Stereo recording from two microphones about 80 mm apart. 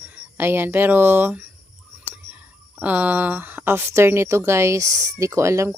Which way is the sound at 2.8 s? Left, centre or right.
Right.